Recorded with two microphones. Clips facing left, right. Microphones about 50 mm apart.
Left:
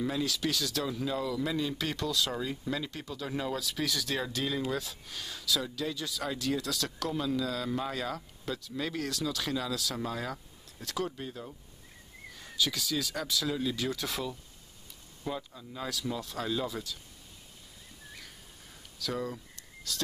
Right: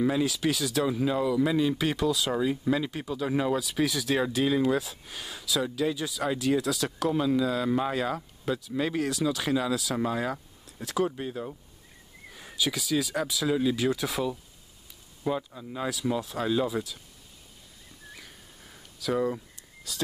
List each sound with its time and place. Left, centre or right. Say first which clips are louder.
0.0 s speech: right 6 dB; centre
12.3 s speech: right 2 dB; centre
15.2 s speech: right 7 dB; right
18.1 s a sound: right 2 dB; centre